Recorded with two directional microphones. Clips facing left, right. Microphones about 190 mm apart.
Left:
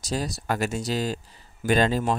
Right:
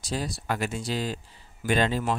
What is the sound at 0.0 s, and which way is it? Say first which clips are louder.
Speech: left 2 dB; 40° left (ahead or behind).